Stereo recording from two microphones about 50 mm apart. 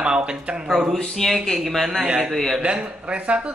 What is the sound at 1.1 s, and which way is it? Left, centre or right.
Speech, centre.